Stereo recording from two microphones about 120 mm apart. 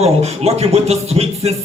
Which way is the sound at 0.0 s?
60° right (ahead or behind).